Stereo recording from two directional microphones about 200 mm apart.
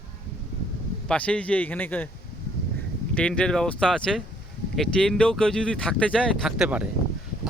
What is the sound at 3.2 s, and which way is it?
Speech, 5° left (ahead or behind).